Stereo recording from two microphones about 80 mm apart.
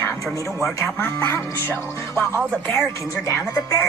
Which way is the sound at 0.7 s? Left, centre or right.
Centre.